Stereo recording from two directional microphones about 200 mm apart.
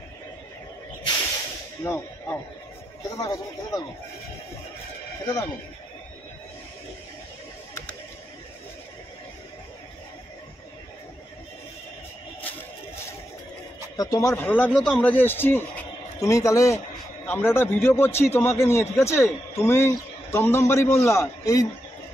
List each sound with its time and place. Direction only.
1.8 s speech: 10° left (ahead or behind)
5.2 s speech: 20° left (ahead or behind)
13.9 s a man's voice: 15° left (ahead or behind)